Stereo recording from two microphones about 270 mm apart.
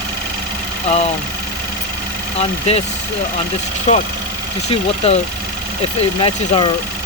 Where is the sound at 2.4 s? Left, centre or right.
Left.